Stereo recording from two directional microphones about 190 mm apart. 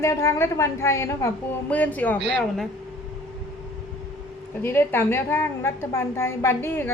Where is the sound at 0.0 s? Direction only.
15° left (ahead or behind).